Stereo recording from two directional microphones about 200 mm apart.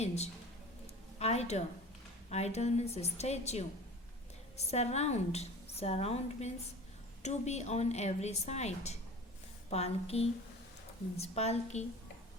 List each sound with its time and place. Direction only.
1.2 s a woman's voice: 30° left (ahead or behind)